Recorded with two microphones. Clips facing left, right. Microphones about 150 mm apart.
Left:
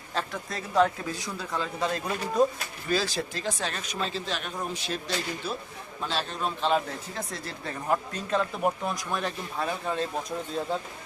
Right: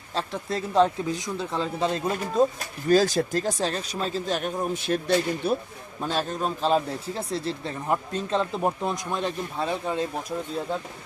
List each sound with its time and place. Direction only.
0.1 s speech: 30° right (ahead or behind)
2.9 s speech: 45° right (ahead or behind)
6.0 s speech: 45° right (ahead or behind); by 10.1 s 15° right (ahead or behind)